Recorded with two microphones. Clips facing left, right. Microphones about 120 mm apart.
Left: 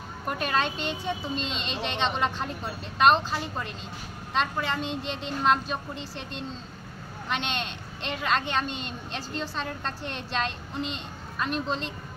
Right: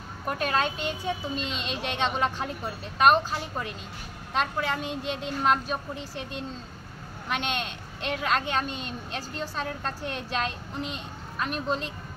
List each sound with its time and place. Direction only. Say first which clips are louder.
0.3 s a woman's voice: right 1 dB; centre (ahead or behind)